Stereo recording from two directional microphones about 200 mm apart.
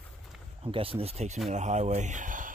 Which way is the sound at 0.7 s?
30° right (ahead or behind).